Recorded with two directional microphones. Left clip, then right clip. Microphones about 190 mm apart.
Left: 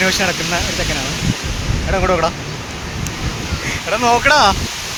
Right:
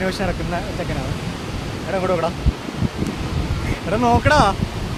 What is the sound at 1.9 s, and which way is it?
Speech, 30° left (ahead or behind).